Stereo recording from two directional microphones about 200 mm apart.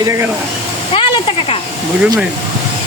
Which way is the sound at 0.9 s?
25° left (ahead or behind).